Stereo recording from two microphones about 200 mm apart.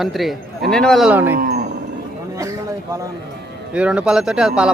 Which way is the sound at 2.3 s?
15° right (ahead or behind).